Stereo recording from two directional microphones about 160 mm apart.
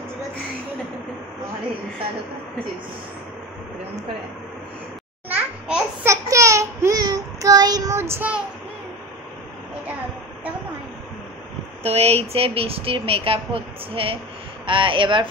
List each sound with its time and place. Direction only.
5.3 s babbling: 15° right (ahead or behind)
11.8 s a woman's voice: 40° right (ahead or behind)